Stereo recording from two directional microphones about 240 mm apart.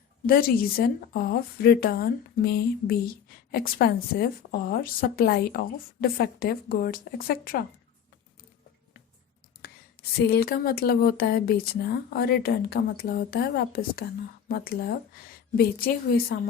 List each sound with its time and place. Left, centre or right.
0.3 s speech: left
10.2 s speech: left